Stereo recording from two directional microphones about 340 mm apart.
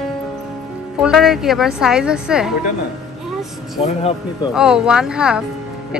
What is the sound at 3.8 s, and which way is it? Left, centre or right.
Speech, centre.